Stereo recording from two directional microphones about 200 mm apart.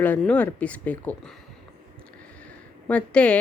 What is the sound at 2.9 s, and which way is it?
Speech, 5° left (ahead or behind).